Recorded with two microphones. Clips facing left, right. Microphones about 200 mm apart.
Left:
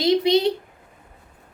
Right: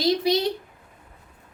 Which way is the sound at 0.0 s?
25° left (ahead or behind).